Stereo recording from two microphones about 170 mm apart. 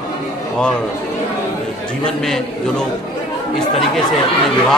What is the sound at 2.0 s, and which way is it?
Speech, 5° left (ahead or behind).